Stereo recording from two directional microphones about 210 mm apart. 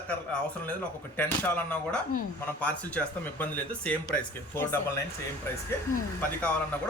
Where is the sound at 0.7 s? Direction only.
10° left (ahead or behind).